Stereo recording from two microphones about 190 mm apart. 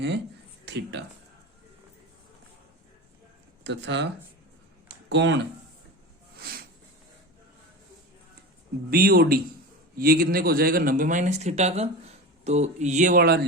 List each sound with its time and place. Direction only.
0.6 s speech: 65° right (ahead or behind)
3.6 s speech: 65° right (ahead or behind)
6.4 s a sound: 55° right (ahead or behind)
8.9 s speech: 55° right (ahead or behind)